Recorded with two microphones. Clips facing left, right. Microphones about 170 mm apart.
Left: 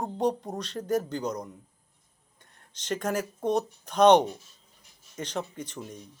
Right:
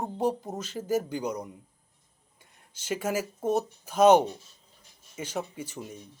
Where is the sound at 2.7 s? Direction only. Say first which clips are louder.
Even; 10° right (ahead or behind).